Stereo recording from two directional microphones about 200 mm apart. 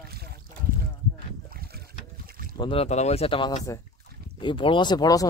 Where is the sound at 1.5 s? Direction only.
50° right (ahead or behind).